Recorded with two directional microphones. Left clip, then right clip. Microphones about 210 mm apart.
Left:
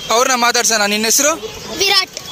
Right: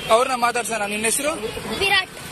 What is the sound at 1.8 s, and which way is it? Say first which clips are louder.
Music: left 5 dB; 55° left (ahead or behind).